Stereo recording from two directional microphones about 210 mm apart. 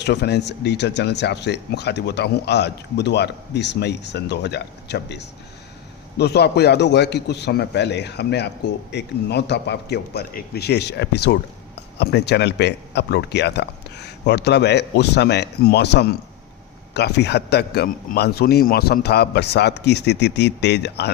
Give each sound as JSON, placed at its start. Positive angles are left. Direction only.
{"t": 0.0, "sound": "speech", "side_deg": 55}